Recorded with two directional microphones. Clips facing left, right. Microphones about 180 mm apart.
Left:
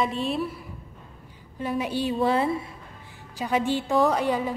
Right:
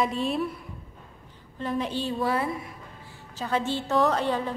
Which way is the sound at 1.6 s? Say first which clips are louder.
Left 2 dB; 10° left (ahead or behind).